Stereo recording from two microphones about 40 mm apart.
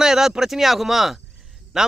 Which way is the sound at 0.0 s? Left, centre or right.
Centre.